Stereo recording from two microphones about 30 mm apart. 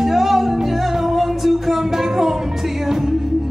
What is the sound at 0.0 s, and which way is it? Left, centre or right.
Music, centre.